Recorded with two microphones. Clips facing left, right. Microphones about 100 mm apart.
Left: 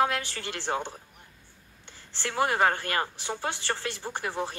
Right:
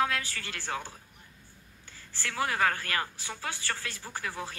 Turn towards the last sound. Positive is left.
turn(degrees=20)  # may be behind; listen again after turning